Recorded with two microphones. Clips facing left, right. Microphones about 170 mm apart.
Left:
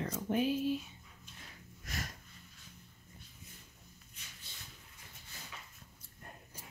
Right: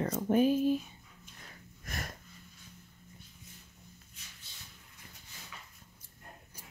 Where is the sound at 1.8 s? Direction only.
55° right (ahead or behind).